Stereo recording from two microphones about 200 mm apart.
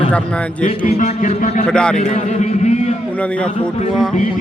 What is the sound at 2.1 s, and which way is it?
Speech, 35° left (ahead or behind).